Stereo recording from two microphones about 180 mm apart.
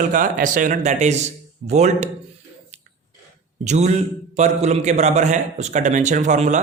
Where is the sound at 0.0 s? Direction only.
50° right (ahead or behind).